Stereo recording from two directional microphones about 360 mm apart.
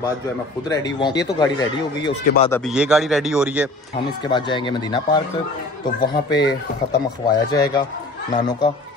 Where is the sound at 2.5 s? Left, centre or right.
Centre.